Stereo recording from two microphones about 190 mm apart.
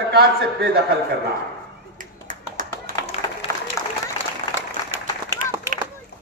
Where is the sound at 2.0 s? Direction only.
45° right (ahead or behind).